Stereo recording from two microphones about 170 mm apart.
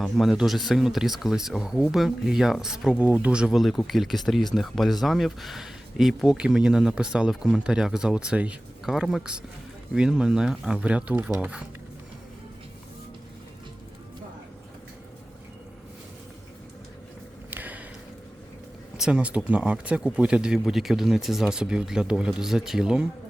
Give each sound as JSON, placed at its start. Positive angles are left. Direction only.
{"t": 0.0, "sound": "speech", "side_deg": 0}
{"t": 17.5, "sound": "a sound", "side_deg": -10}
{"t": 18.9, "sound": "speech", "side_deg": -5}